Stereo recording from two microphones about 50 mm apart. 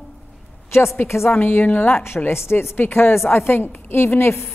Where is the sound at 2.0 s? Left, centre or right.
Left.